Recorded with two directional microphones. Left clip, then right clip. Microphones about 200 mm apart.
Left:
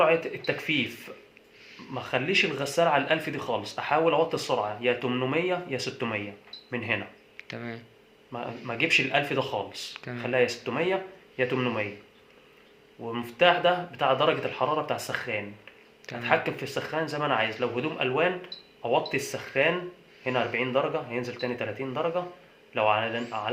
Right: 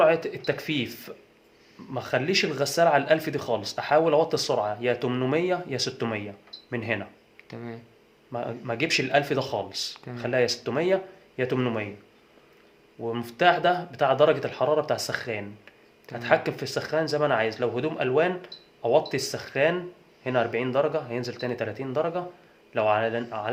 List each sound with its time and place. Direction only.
0.0 s speech: 55° right (ahead or behind)
7.3 s a sound: 10° right (ahead or behind)
8.3 s speech: 60° right (ahead or behind)
9.9 s speech: 10° right (ahead or behind)
10.2 s speech: 55° right (ahead or behind)
13.1 s speech: 55° right (ahead or behind)